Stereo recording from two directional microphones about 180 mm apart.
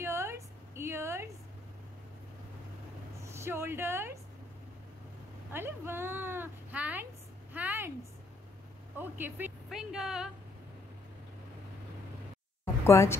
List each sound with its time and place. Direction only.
0.0 s a sound: 15° right (ahead or behind)
3.3 s a woman's voice: 15° right (ahead or behind)
5.5 s speech: 10° right (ahead or behind)
7.5 s a sound: 10° right (ahead or behind)
8.9 s a woman's voice: 10° right (ahead or behind)
12.8 s speech: 15° left (ahead or behind)